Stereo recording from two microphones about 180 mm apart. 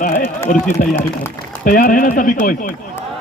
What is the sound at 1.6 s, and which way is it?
Speech, 50° left (ahead or behind).